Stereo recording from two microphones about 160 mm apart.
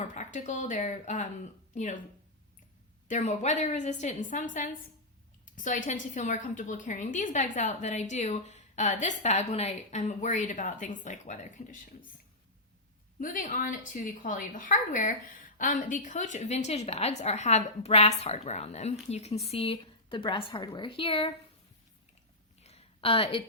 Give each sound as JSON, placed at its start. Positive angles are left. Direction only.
{"t": 0.0, "sound": "a woman's voice", "side_deg": 50}
{"t": 3.1, "sound": "a woman's voice", "side_deg": 45}
{"t": 13.1, "sound": "a woman's voice", "side_deg": 55}
{"t": 22.6, "sound": "a sound", "side_deg": 40}